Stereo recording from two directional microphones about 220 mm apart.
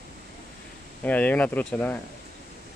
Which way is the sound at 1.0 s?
5° left (ahead or behind).